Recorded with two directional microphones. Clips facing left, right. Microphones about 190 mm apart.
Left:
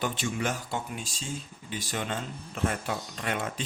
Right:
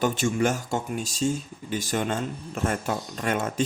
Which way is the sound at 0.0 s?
45° right (ahead or behind).